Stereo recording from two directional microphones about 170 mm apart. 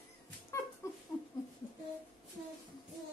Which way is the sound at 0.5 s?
15° left (ahead or behind).